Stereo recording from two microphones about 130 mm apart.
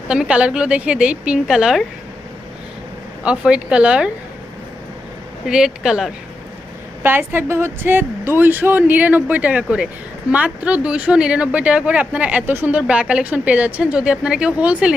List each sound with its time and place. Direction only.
0.1 s speech: 5° right (ahead or behind)
3.2 s speech: 10° right (ahead or behind)
5.5 s speech: 5° right (ahead or behind)
7.0 s speech: 15° right (ahead or behind)